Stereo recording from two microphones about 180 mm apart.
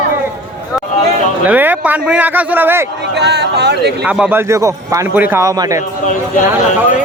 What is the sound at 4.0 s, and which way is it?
Speech, 5° right (ahead or behind).